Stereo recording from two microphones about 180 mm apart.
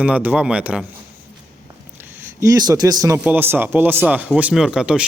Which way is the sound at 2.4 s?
20° right (ahead or behind).